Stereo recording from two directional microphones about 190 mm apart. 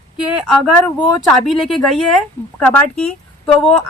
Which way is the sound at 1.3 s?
Centre (ahead or behind).